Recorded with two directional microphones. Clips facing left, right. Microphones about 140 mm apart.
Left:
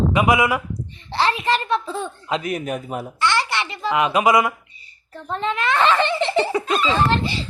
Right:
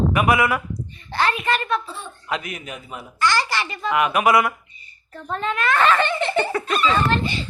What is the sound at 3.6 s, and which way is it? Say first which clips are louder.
A child's voice: left 1 dB; 25° left (ahead or behind).